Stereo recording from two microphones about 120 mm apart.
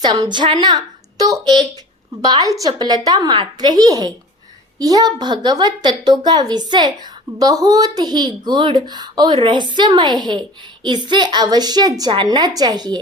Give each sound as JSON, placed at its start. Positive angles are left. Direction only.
{"t": 0.0, "sound": "a woman's voice", "side_deg": -35}